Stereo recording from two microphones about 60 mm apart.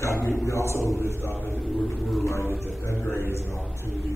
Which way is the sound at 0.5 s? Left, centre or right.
Left.